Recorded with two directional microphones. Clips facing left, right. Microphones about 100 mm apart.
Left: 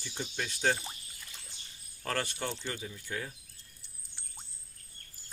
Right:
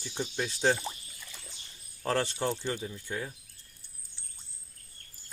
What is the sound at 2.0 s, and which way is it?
Speech, 25° right (ahead or behind).